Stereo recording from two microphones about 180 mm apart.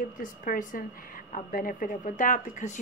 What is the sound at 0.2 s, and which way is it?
Speech, 45° left (ahead or behind).